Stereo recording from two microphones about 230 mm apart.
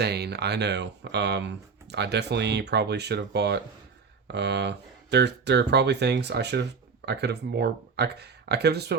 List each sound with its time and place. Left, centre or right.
0.0 s speech: right